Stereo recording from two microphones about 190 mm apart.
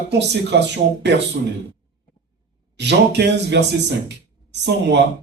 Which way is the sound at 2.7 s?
65° right (ahead or behind).